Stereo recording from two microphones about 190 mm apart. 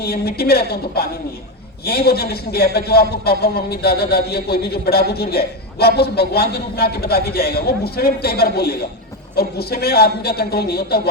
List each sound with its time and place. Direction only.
0.0 s a man's voice: 55° left (ahead or behind)